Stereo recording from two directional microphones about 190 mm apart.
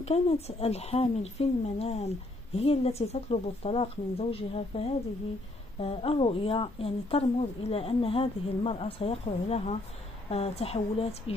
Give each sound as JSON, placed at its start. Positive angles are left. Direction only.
{"t": 0.0, "sound": "speech", "side_deg": 35}